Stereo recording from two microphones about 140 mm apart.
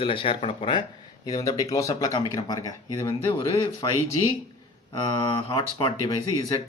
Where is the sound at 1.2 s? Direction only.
25° left (ahead or behind).